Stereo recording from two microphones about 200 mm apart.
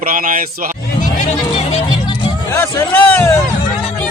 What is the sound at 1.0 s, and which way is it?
Music, 35° left (ahead or behind).